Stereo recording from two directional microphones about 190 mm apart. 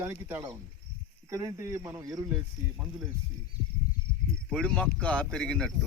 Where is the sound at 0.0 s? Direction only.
15° right (ahead or behind).